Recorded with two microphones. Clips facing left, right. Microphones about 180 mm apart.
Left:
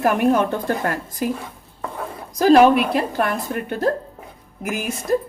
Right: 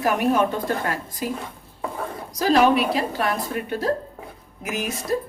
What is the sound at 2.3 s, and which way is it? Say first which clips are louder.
Speech: left 5 dB; 50° left (ahead or behind).